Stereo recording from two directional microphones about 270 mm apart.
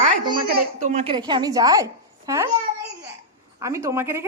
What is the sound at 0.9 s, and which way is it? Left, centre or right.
A woman's voice, right.